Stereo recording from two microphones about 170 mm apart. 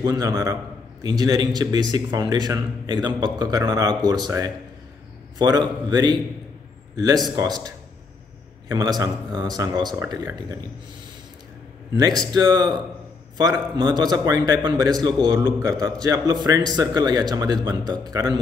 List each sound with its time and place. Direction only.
0.0 s a man's voice: 20° right (ahead or behind)
7.3 s a man's voice: 25° right (ahead or behind)
12.0 s a man's voice: 25° right (ahead or behind)